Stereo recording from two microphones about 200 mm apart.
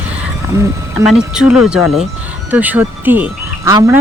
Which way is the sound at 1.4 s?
5° right (ahead or behind).